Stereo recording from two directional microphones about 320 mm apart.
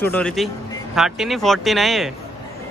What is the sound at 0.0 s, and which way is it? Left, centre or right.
A man's voice, centre.